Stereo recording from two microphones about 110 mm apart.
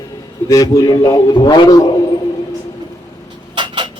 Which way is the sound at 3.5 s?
45° right (ahead or behind).